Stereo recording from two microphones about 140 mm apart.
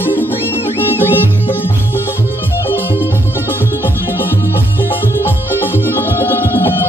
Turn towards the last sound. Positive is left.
turn(degrees=15)  # may be behind; listen again after turning